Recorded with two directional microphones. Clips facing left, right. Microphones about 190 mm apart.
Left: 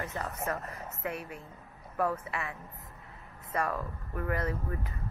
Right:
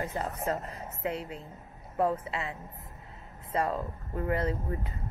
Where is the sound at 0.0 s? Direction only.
25° right (ahead or behind).